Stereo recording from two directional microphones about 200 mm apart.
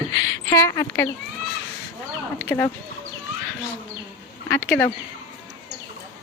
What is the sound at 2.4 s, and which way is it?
Speech, 10° left (ahead or behind).